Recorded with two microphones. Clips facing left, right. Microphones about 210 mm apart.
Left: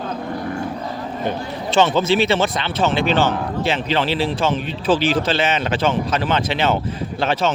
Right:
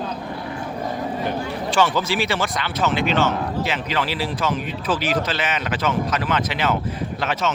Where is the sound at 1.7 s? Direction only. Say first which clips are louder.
Left 5 dB; 25° left (ahead or behind).